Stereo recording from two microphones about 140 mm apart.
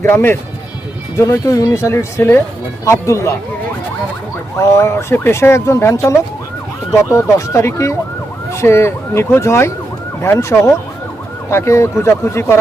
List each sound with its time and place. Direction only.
0.0 s speech: 15° left (ahead or behind)
4.5 s speech: 20° left (ahead or behind)